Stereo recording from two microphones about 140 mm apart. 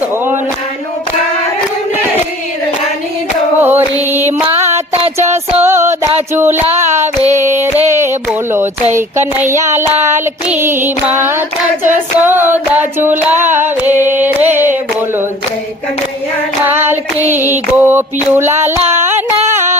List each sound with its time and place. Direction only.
3.6 s music: 15° right (ahead or behind)
4.7 s music: 50° right (ahead or behind)
5.1 s music: 20° right (ahead or behind)
6.1 s a sound: 15° right (ahead or behind)
8.5 s child singing: 15° right (ahead or behind)
16.9 s child singing: 15° right (ahead or behind)
18.8 s music: 50° right (ahead or behind)
19.5 s a sound: 20° right (ahead or behind)